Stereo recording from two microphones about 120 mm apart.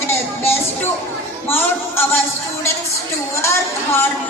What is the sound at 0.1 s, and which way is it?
Music, 20° left (ahead or behind).